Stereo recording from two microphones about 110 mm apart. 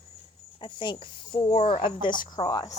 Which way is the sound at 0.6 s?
45° left (ahead or behind).